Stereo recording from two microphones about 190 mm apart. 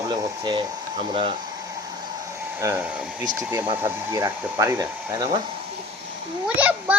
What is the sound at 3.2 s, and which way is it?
Speech, 20° right (ahead or behind).